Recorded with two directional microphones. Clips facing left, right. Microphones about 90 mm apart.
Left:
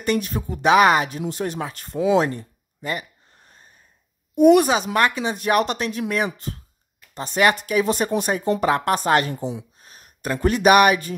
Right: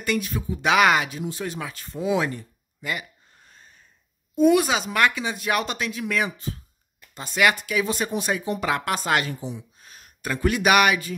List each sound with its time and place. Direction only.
0.0 s speech: 35° left (ahead or behind)
4.4 s a woman's voice: 60° left (ahead or behind)
4.9 s speech: 35° left (ahead or behind)